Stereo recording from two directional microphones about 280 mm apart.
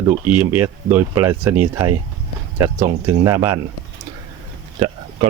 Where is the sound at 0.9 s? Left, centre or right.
Centre.